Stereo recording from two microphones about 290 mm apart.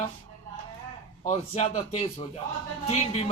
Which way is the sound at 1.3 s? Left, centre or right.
Left.